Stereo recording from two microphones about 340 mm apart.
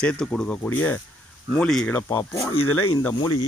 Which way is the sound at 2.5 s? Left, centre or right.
Left.